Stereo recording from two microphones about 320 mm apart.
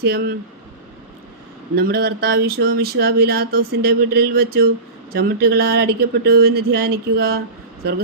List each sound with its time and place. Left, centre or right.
0.0 s speech: right
1.7 s speech: right